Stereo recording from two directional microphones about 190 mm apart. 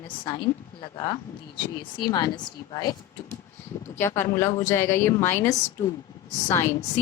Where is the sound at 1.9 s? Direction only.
25° left (ahead or behind).